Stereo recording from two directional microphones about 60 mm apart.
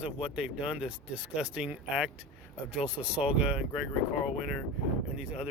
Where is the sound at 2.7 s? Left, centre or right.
Centre.